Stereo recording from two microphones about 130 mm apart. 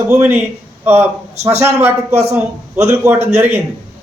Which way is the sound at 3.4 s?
15° right (ahead or behind).